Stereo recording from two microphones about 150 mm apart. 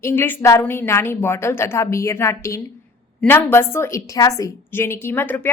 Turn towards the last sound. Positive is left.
turn(degrees=15)  # may be behind; listen again after turning